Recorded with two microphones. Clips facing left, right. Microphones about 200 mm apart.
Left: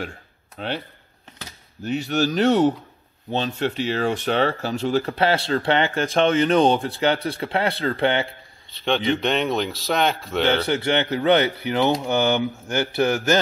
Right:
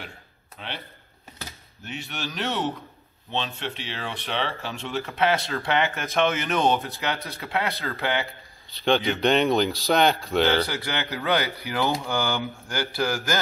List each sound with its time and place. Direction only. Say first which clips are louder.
1.9 s speech: left 12 dB; 40° left (ahead or behind)
8.6 s a man's voice: left 1 dB; centre (ahead or behind)
10.7 s speech: left 9 dB; 25° left (ahead or behind)